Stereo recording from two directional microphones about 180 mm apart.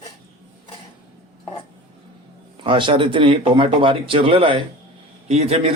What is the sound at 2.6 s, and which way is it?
Speech, 30° right (ahead or behind).